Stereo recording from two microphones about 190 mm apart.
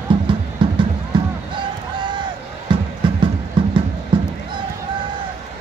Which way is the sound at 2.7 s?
25° right (ahead or behind).